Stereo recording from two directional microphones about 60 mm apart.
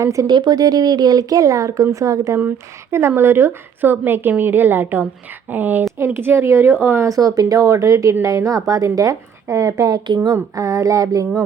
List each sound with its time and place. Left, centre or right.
0.0 s a woman's voice: right
3.2 s a woman's voice: right
6.1 s a woman's voice: right
7.0 s speech: right